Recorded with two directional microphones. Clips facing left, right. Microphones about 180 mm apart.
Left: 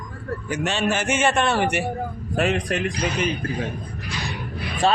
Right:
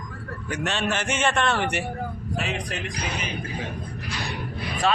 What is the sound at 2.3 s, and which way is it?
Speech, 55° left (ahead or behind).